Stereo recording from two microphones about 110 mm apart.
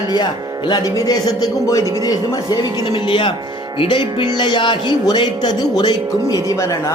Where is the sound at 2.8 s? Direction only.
50° left (ahead or behind).